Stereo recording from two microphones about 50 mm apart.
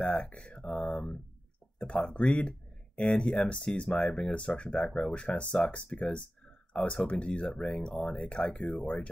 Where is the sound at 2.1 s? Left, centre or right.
Left.